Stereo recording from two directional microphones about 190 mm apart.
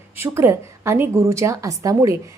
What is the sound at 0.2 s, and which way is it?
A woman's voice, 15° right (ahead or behind).